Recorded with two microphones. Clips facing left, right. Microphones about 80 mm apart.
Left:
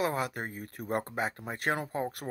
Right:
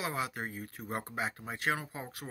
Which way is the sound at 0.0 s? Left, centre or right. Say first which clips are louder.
Left 5 dB; left.